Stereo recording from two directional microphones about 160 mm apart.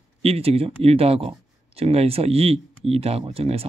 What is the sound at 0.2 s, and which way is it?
Speech, 40° right (ahead or behind).